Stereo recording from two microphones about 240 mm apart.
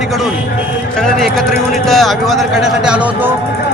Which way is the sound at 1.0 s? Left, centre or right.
Centre.